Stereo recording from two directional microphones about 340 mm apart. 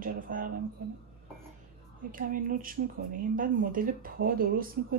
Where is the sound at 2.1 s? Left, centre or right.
Right.